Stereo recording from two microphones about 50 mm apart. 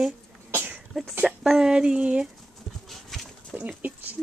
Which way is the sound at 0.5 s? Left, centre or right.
Right.